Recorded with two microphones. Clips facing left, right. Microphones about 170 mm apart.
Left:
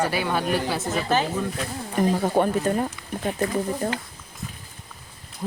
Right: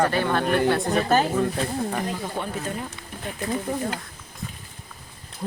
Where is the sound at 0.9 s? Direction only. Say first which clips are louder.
Left 1 dB; 50° right (ahead or behind).